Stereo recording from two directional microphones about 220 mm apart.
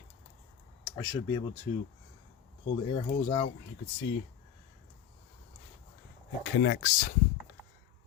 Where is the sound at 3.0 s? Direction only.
20° left (ahead or behind).